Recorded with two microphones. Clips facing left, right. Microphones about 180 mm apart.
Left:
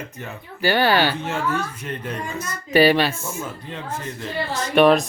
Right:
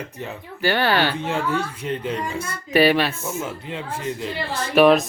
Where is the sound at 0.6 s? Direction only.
5° left (ahead or behind).